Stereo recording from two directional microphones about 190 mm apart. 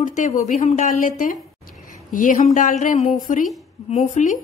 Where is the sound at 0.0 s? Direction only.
40° left (ahead or behind).